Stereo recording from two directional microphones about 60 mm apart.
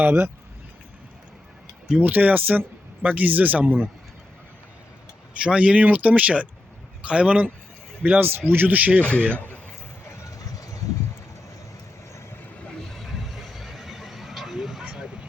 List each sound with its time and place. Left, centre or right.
0.0 s speech: right
2.0 s speech: right
5.4 s speech: centre
9.3 s a man's voice: left
10.6 s a sound: left
12.9 s a sound: centre